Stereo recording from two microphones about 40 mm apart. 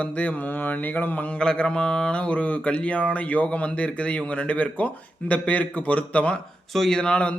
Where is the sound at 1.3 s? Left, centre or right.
Left.